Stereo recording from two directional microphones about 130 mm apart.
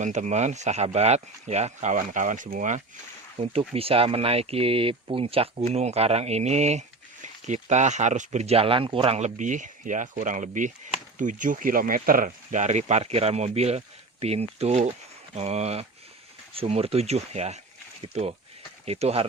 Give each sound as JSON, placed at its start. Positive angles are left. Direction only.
{"t": 0.0, "sound": "speech", "side_deg": -65}
{"t": 3.4, "sound": "speech", "side_deg": -45}
{"t": 9.1, "sound": "speech", "side_deg": -65}